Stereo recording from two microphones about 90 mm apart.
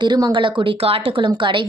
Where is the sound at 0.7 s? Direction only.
90° right.